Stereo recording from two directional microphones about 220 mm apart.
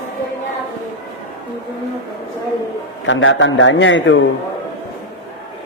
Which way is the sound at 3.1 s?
60° left (ahead or behind).